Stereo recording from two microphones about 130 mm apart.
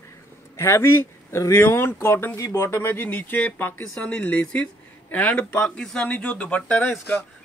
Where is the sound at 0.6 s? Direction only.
20° left (ahead or behind).